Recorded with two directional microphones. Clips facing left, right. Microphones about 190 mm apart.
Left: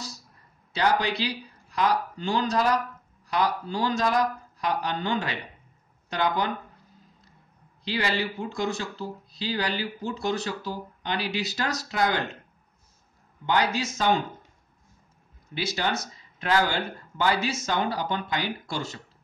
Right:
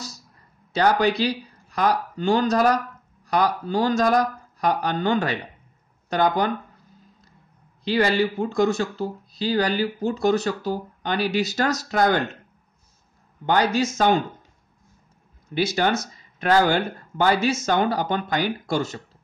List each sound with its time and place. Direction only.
0.7 s speech: 45° right (ahead or behind)
7.8 s speech: 45° right (ahead or behind)
13.5 s speech: 50° right (ahead or behind)
15.5 s speech: 50° right (ahead or behind)